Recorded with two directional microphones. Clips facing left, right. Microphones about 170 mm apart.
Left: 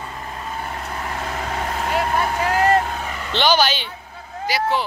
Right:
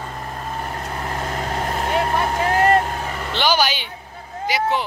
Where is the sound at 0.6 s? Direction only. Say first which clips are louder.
Right 1 dB; 40° right (ahead or behind).